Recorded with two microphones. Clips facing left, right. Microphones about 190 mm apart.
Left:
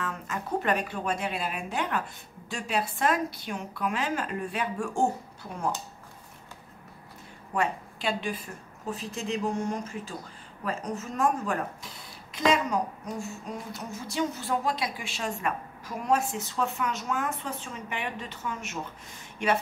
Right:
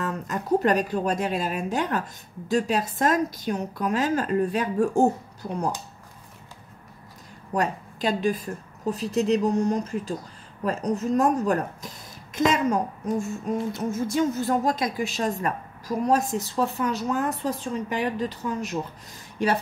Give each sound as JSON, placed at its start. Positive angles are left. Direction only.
{"t": 0.0, "sound": "speech", "side_deg": -40}
{"t": 7.5, "sound": "a woman's voice", "side_deg": -40}